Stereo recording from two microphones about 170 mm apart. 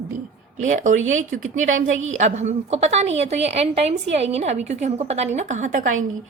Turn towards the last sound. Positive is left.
turn(degrees=-50)  # may be behind; listen again after turning